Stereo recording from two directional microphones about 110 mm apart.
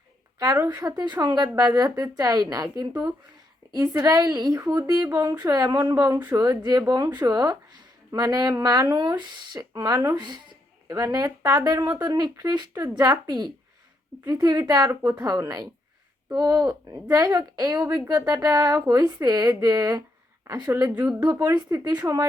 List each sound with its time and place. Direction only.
0.3 s a woman's voice: 30° right (ahead or behind)
0.9 s speech: 40° right (ahead or behind)
2.9 s speech: 15° right (ahead or behind)
3.8 s speech: 35° right (ahead or behind)
14.8 s speech: 30° right (ahead or behind)
20.9 s speech: 15° right (ahead or behind)
21.5 s speech: 40° right (ahead or behind)